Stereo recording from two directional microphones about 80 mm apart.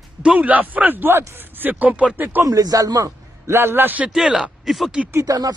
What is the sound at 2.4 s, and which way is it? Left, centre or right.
A man's voice, right.